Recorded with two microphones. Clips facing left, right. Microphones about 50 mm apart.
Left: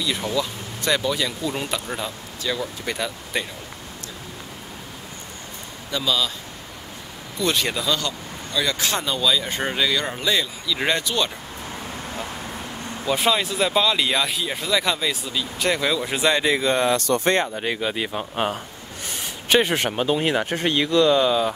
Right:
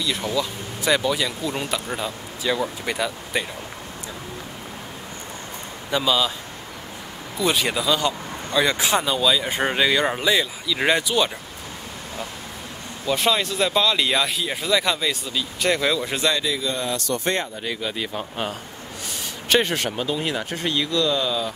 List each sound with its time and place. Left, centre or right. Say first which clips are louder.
0.0 s speech: even; centre
5.9 s speech: right 3 dB; centre
7.3 s speech: right 1 dB; centre
8.0 s speech: right 5 dB; right
13.0 s speech: even; centre
16.3 s speech: left 5 dB; left
17.2 s speech: left 4 dB; left
17.8 s speech: left 2 dB; left
19.5 s speech: left 1 dB; centre
20.0 s speech: left 4 dB; left